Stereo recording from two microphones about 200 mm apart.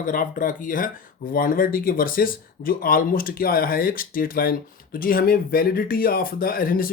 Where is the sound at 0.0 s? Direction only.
45° left (ahead or behind).